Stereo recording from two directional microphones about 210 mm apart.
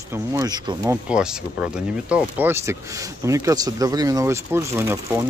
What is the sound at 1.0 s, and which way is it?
Speech, 5° right (ahead or behind).